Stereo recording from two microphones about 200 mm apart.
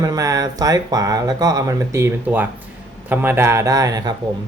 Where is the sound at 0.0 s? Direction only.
15° right (ahead or behind).